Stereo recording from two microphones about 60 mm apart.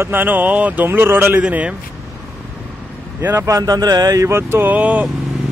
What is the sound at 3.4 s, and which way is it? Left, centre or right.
Speech, right.